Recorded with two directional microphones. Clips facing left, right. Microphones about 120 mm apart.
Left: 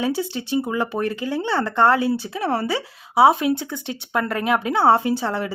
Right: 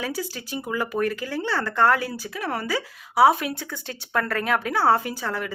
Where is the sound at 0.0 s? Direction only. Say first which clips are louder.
Left 6 dB; 25° left (ahead or behind).